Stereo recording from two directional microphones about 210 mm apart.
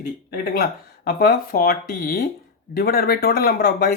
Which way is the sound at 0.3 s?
45° left (ahead or behind).